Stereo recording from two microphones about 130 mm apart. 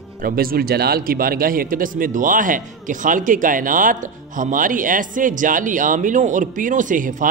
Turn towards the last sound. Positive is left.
turn(degrees=-85)